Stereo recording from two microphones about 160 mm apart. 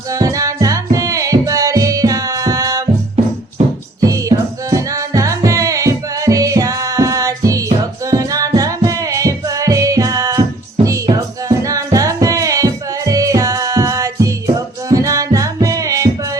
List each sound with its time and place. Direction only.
0.1 s music: 20° right (ahead or behind)
4.0 s music: 20° right (ahead or behind)